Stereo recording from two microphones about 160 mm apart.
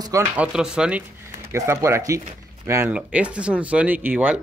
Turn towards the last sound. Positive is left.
turn(degrees=-10)  # may be behind; listen again after turning